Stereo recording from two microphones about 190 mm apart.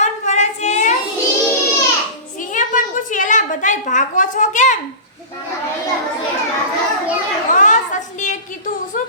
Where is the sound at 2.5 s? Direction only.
40° left (ahead or behind).